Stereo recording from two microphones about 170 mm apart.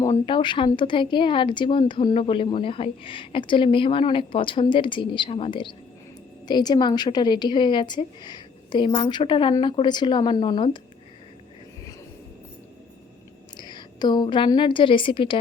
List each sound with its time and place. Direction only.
0.3 s speech: 30° left (ahead or behind)
13.6 s a woman's voice: 25° left (ahead or behind)